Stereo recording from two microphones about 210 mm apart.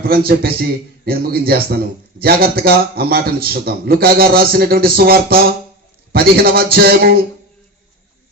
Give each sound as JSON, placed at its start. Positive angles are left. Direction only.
{"t": 0.0, "sound": "a man's voice", "side_deg": -45}